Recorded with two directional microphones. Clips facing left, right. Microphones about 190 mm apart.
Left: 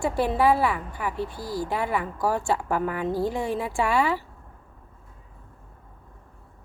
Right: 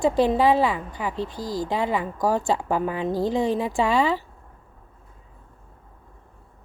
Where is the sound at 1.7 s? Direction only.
20° right (ahead or behind).